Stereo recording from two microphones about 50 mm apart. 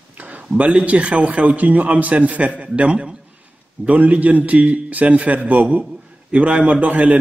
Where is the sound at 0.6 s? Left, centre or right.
Right.